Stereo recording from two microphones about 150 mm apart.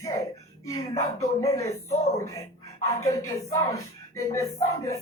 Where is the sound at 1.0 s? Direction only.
20° left (ahead or behind).